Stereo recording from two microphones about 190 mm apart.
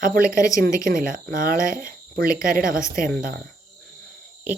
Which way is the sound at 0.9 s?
45° right (ahead or behind).